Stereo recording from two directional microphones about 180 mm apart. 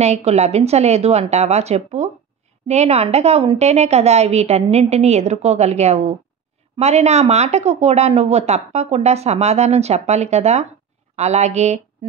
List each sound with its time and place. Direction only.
0.0 s speech: 35° right (ahead or behind)